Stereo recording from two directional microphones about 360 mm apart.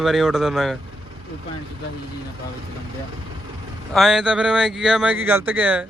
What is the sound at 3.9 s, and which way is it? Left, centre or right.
Speech, centre.